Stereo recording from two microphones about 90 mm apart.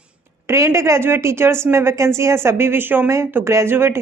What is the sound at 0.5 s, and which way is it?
A woman's voice, 30° right (ahead or behind).